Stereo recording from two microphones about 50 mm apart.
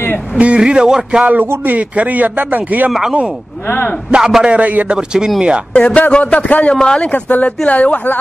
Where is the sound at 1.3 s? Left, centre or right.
Right.